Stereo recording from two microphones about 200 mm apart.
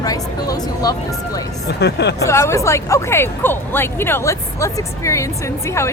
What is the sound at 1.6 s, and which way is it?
Speech, 55° left (ahead or behind).